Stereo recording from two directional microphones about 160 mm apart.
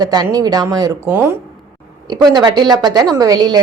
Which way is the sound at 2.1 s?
25° right (ahead or behind).